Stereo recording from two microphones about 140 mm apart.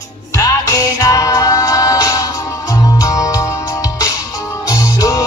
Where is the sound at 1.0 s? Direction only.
25° left (ahead or behind).